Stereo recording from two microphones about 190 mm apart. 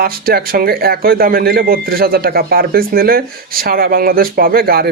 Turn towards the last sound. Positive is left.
turn(degrees=-50)  # may be behind; listen again after turning